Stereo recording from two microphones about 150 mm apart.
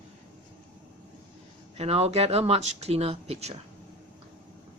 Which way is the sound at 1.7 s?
45° right (ahead or behind).